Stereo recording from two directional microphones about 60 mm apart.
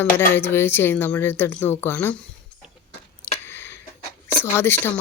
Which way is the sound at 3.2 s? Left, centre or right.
Left.